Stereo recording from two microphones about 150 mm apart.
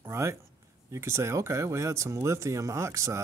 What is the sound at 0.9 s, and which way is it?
Speech, 20° right (ahead or behind).